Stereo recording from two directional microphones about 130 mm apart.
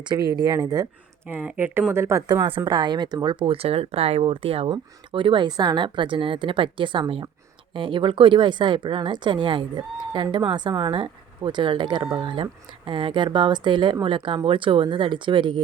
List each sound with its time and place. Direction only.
0.0 s speech: 30° right (ahead or behind)
1.3 s speech: 15° right (ahead or behind)
2.2 s speech: 30° right (ahead or behind)